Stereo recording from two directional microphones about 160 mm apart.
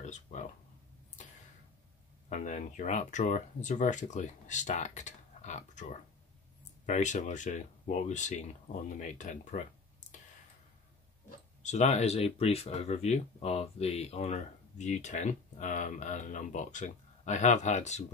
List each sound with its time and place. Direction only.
0.0 s speech: 45° left (ahead or behind)
2.2 s speech: 50° left (ahead or behind)
11.2 s speech: 45° left (ahead or behind)